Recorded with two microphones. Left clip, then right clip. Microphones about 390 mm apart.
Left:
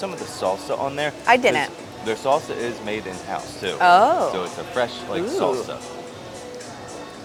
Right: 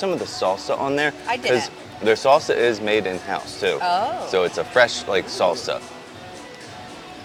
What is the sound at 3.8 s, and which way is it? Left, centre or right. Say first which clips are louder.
Speech: left 11 dB; left.